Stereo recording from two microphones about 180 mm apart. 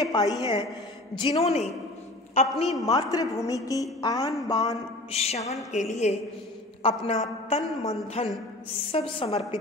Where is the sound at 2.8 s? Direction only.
20° left (ahead or behind).